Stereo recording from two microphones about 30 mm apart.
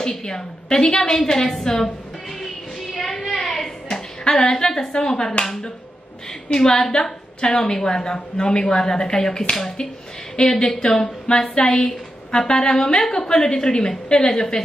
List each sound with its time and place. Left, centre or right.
0.2 s a woman's voice: left
2.4 s music: centre
3.3 s a sound: centre
4.3 s a woman's voice: left
6.5 s a woman's voice: left
10.4 s speech: centre
10.8 s a woman's voice: left